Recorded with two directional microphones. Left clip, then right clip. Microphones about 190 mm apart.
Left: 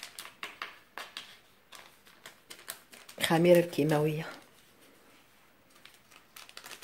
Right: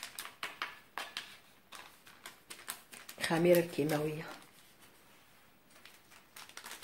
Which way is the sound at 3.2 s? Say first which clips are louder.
Left 5 dB; 40° left (ahead or behind).